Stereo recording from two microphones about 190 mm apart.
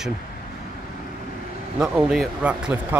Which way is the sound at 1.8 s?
5° right (ahead or behind).